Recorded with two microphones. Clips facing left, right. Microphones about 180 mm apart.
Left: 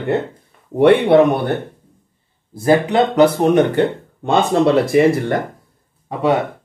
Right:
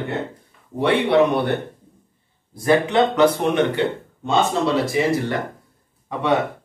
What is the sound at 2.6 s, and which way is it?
Speech, 35° left (ahead or behind).